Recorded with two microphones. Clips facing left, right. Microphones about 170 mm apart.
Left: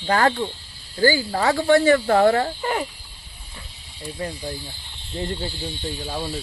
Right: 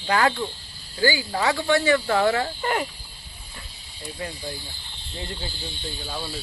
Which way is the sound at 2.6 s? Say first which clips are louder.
Left 1 dB; 5° left (ahead or behind).